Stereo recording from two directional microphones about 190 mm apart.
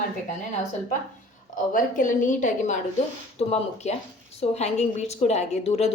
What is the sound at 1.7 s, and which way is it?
A woman's voice, 40° left (ahead or behind).